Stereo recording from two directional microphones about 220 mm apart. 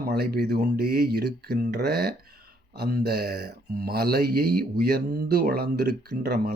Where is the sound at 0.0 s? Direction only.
45° right (ahead or behind).